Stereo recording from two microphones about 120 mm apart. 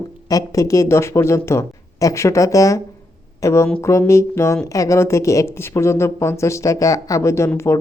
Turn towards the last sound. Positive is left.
turn(degrees=25)  # may be behind; listen again after turning